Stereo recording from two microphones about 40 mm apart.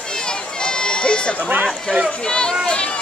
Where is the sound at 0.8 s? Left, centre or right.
Left.